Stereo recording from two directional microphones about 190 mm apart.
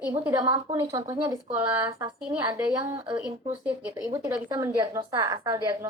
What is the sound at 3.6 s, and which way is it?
A woman's voice, 10° right (ahead or behind).